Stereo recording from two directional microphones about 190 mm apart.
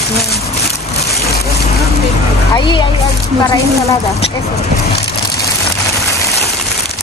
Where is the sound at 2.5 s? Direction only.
25° left (ahead or behind).